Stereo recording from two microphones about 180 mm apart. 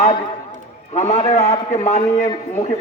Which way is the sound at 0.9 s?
40° left (ahead or behind).